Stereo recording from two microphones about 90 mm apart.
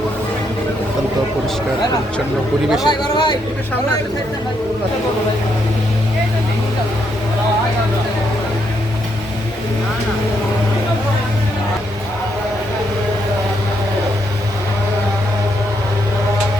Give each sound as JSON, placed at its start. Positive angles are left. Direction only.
{"t": 2.8, "sound": "speech", "side_deg": 55}